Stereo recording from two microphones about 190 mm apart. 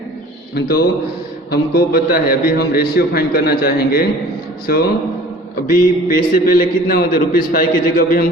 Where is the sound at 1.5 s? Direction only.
55° left (ahead or behind).